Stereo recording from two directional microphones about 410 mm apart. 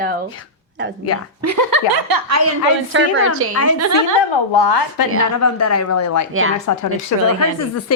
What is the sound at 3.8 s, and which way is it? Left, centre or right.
Speech, right.